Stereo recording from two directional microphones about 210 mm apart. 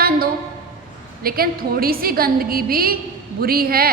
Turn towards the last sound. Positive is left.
turn(degrees=-45)  # may be behind; listen again after turning